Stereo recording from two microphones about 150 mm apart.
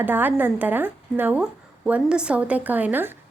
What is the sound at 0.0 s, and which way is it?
A woman's voice, 15° right (ahead or behind).